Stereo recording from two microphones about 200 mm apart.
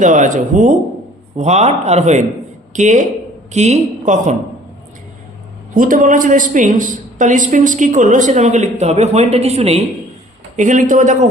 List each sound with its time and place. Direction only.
0.0 s a woman's voice: 40° right (ahead or behind)
5.7 s a woman's voice: 40° right (ahead or behind)